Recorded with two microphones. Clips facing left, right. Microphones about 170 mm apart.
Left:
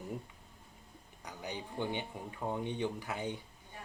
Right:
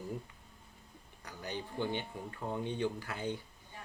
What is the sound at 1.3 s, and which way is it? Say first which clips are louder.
Speech: right 1 dB; 15° left (ahead or behind).